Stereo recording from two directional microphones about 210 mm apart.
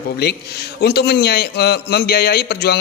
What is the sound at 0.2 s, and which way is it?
A man's voice, 50° left (ahead or behind).